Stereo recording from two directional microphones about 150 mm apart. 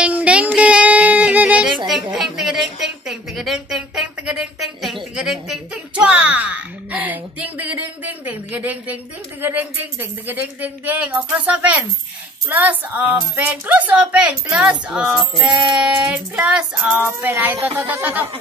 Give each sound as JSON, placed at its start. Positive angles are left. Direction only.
{"t": 0.0, "sound": "child singing", "side_deg": -10}
{"t": 2.1, "sound": "a sound", "side_deg": 0}
{"t": 9.4, "sound": "speech", "side_deg": -15}